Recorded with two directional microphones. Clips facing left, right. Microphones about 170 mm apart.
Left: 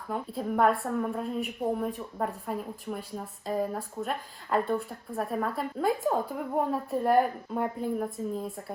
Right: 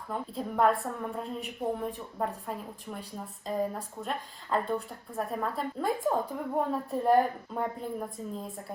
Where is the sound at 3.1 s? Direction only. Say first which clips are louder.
Even; centre (ahead or behind).